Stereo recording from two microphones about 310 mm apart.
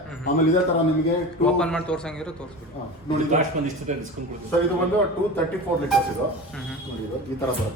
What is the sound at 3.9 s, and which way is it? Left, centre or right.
Speech, right.